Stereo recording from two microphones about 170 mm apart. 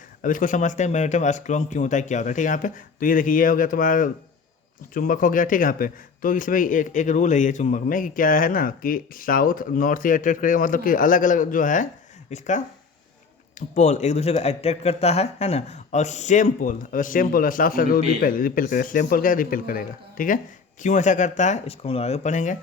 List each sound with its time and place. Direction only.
0.2 s a man's voice: 50° left (ahead or behind)